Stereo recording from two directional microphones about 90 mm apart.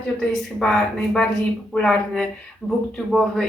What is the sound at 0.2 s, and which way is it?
A woman's voice, 10° left (ahead or behind).